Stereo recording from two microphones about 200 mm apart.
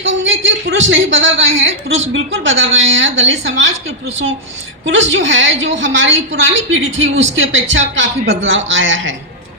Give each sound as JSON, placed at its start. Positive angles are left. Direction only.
{"t": 0.0, "sound": "a man's voice", "side_deg": -70}